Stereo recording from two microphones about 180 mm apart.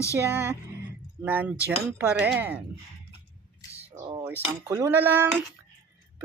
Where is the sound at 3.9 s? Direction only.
15° right (ahead or behind).